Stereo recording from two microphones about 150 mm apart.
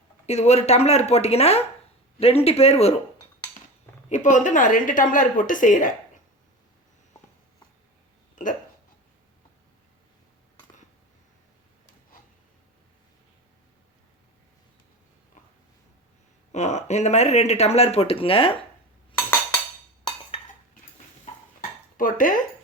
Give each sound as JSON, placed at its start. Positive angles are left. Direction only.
{"t": 0.3, "sound": "speech", "side_deg": 45}
{"t": 4.1, "sound": "speech", "side_deg": 55}
{"t": 8.4, "sound": "speech", "side_deg": 60}
{"t": 16.5, "sound": "speech", "side_deg": 50}
{"t": 21.9, "sound": "speech", "side_deg": 65}